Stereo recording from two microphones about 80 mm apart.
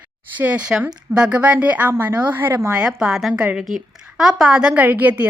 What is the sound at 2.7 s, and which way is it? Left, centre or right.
A woman's voice, centre.